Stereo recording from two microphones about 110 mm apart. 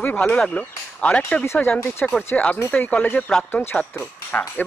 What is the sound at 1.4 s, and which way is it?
Speech, 25° left (ahead or behind).